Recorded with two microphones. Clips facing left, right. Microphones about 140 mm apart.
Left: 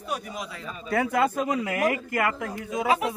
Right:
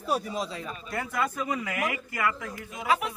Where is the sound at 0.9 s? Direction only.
75° left (ahead or behind).